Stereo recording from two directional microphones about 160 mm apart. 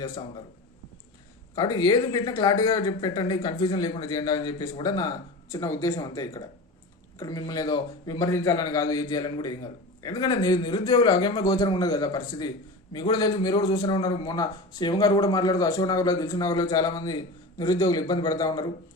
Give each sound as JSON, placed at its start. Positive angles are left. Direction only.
{"t": 1.5, "sound": "a man's voice", "side_deg": 25}